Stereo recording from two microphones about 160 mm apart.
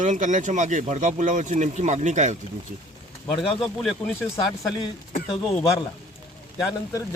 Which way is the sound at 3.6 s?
Centre (ahead or behind).